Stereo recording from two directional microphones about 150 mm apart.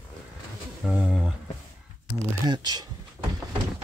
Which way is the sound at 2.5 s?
30° right (ahead or behind).